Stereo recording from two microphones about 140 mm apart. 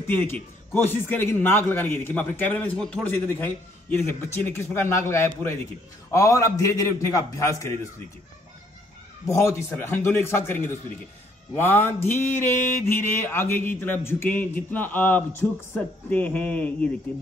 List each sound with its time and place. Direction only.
0.0 s a man's voice: 15° left (ahead or behind)
9.2 s a man's voice: 20° left (ahead or behind)